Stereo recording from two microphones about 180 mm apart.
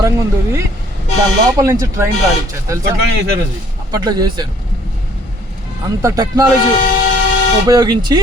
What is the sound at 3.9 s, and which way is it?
Speech, 20° right (ahead or behind).